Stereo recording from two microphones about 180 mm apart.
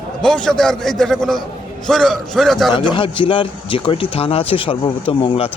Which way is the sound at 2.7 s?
30° left (ahead or behind).